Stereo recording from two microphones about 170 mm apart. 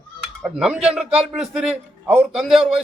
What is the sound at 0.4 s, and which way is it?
A man's voice, 5° right (ahead or behind).